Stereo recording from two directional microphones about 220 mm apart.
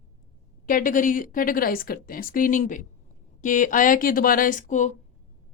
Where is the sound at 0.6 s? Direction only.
40° left (ahead or behind).